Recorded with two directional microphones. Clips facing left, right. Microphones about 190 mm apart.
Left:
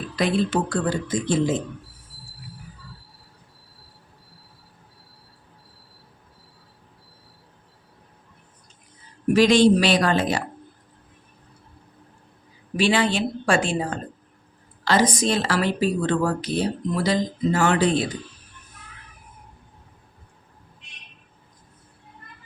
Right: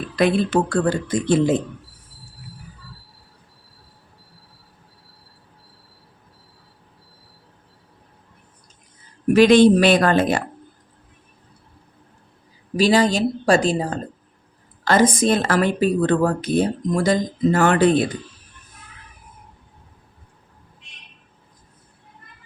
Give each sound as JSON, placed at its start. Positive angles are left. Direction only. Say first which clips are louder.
{"t": 0.2, "sound": "speech", "louder": "right 4 dB", "side_deg": -60}
{"t": 9.3, "sound": "speech", "louder": "right 4 dB", "side_deg": -55}
{"t": 12.7, "sound": "a woman's voice", "louder": "right 4 dB", "side_deg": -40}
{"t": 14.8, "sound": "speech", "louder": "right 4 dB", "side_deg": -50}